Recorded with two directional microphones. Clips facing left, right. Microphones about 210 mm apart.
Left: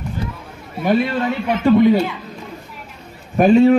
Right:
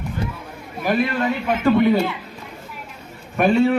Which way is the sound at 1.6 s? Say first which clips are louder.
Left 4 dB; 15° left (ahead or behind).